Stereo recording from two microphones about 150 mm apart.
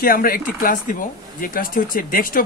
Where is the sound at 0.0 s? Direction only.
75° left (ahead or behind).